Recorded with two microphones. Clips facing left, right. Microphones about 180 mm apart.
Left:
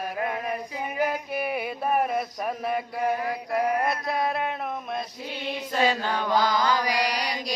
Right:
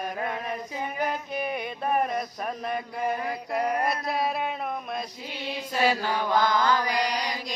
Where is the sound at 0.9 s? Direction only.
10° left (ahead or behind).